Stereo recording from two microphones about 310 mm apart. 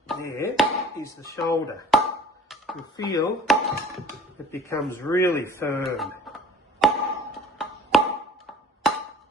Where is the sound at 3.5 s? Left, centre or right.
Centre.